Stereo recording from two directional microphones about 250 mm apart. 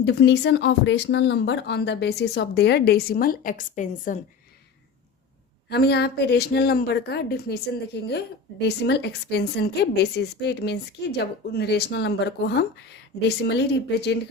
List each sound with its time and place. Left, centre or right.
0.0 s speech: left
5.6 s a woman's voice: left